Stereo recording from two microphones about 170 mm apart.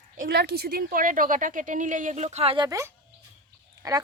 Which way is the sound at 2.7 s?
20° right (ahead or behind).